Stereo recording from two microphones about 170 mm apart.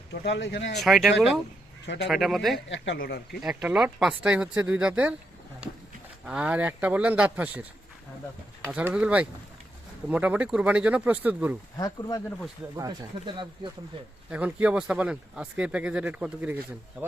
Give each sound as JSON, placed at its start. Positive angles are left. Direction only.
{"t": 0.1, "sound": "speech", "side_deg": 85}
{"t": 0.8, "sound": "speech", "side_deg": 0}
{"t": 2.6, "sound": "speech", "side_deg": 90}
{"t": 3.4, "sound": "speech", "side_deg": -5}
{"t": 6.2, "sound": "speech", "side_deg": -5}
{"t": 11.8, "sound": "speech", "side_deg": 20}
{"t": 12.7, "sound": "speech", "side_deg": -20}
{"t": 14.3, "sound": "speech", "side_deg": -10}